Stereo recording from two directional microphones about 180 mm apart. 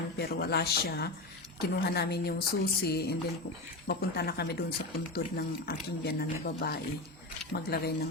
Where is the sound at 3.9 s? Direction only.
60° left (ahead or behind).